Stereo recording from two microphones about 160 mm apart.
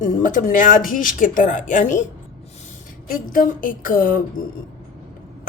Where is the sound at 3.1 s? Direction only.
60° left (ahead or behind).